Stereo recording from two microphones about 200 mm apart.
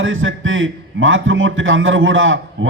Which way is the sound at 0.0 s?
75° right (ahead or behind).